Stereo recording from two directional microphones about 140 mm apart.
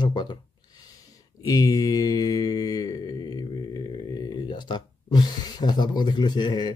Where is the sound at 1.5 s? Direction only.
25° left (ahead or behind).